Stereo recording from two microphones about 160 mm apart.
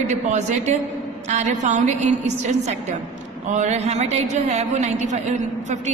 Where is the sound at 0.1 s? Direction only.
45° right (ahead or behind).